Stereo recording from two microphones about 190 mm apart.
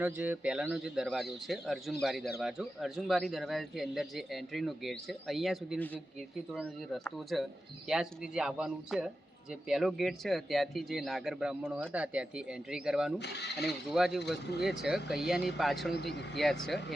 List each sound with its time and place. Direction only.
0.0 s a man's voice: 10° right (ahead or behind)
13.1 s speech: 60° left (ahead or behind)
13.7 s a man's voice: centre (ahead or behind)
15.9 s speech: 60° left (ahead or behind)
16.4 s a man's voice: centre (ahead or behind)